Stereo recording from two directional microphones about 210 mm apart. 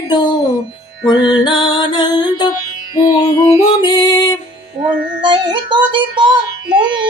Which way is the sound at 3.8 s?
20° left (ahead or behind).